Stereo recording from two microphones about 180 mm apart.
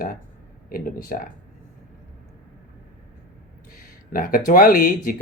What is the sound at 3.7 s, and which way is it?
Speech, 50° left (ahead or behind).